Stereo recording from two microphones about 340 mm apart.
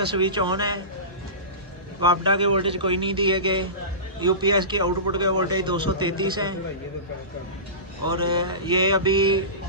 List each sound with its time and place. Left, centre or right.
0.2 s a man's voice: centre
2.0 s a man's voice: centre
8.4 s a man's voice: centre